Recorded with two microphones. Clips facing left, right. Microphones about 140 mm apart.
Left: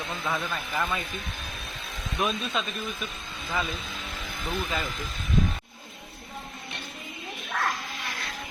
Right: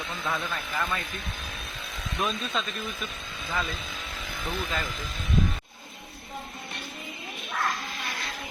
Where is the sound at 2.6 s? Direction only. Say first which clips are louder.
Right 1 dB; 10° left (ahead or behind).